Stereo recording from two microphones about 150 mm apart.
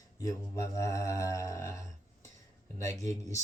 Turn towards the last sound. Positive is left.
turn(degrees=20)  # may be behind; listen again after turning